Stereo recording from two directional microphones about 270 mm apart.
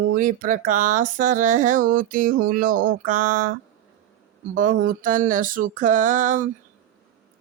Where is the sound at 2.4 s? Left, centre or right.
Right.